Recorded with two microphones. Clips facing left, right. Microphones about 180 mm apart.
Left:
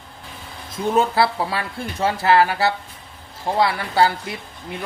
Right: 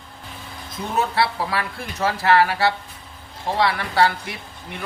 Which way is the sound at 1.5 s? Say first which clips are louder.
Even; 25° left (ahead or behind).